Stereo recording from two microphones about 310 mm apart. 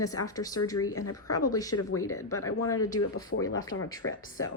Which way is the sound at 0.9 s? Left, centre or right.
Left.